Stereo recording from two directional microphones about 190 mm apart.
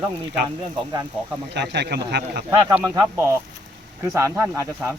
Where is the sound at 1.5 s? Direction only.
65° right (ahead or behind).